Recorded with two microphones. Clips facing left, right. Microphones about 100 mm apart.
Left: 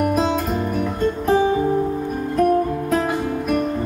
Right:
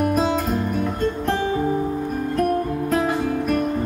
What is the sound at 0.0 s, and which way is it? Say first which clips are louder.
Music: left 1 dB; centre (ahead or behind).